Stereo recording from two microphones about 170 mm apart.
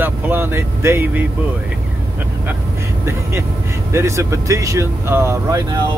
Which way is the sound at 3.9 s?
15° right (ahead or behind).